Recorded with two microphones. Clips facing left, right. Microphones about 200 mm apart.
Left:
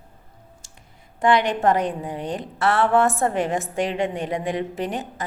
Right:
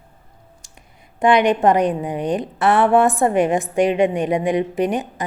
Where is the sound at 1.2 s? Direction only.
15° right (ahead or behind).